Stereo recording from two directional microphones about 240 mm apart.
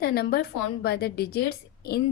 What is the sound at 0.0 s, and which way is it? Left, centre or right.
A woman's voice, left.